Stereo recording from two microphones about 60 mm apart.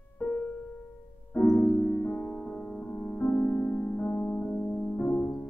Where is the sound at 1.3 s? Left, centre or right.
Centre.